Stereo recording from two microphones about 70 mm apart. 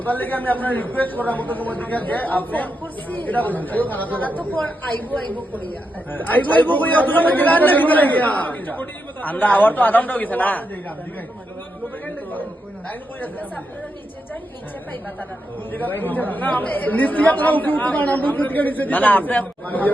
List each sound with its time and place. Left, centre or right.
0.0 s a man's voice: left
6.1 s a man's voice: left
12.0 s a sound: left
15.7 s a man's voice: left